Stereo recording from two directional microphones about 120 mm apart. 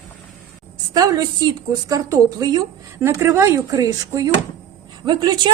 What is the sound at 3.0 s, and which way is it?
A woman's voice, 25° right (ahead or behind).